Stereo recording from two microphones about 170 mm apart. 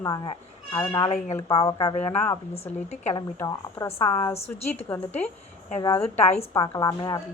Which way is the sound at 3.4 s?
15° left (ahead or behind).